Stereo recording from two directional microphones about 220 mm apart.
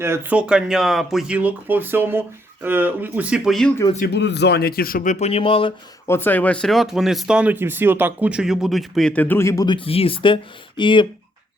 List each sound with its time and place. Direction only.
0.0 s speech: 10° right (ahead or behind)
3.9 s speech: 45° left (ahead or behind); by 5.7 s 25° left (ahead or behind)
6.1 s speech: 10° left (ahead or behind)